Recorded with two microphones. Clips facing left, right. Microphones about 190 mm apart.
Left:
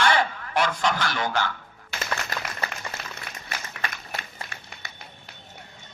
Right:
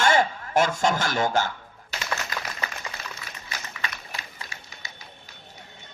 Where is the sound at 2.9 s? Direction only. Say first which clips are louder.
Left 1 dB; 55° left (ahead or behind).